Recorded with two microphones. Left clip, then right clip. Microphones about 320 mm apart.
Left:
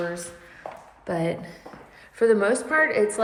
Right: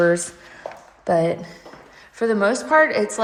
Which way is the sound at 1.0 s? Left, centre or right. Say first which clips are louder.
Right 8 dB; centre.